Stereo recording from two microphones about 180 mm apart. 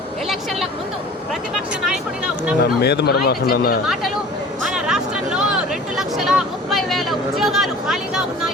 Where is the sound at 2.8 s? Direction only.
65° left (ahead or behind).